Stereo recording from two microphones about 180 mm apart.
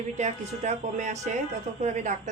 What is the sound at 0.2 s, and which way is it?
Speech, 40° right (ahead or behind).